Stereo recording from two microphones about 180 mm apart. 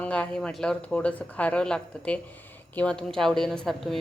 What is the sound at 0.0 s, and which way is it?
A woman's voice, 5° left (ahead or behind).